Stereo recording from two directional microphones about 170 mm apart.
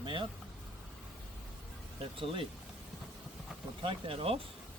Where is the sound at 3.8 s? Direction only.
30° right (ahead or behind).